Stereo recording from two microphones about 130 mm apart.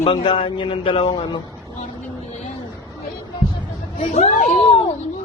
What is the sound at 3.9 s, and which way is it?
Speech, 65° left (ahead or behind).